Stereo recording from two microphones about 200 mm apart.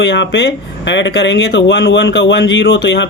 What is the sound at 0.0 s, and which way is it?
Speech, 60° left (ahead or behind).